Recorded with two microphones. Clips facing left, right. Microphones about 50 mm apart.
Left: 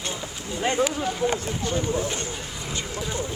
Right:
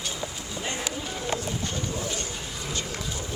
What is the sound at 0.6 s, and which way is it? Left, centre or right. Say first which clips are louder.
Run: left 10 dB; left.